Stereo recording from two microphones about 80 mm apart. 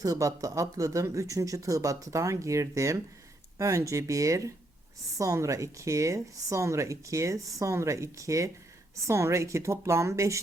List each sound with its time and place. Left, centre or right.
0.0 s speech: right